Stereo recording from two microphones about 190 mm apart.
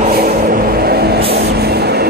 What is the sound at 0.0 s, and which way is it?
Vehicle, 50° right (ahead or behind).